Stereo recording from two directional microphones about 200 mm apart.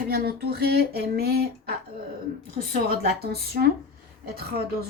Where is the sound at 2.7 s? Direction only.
50° right (ahead or behind).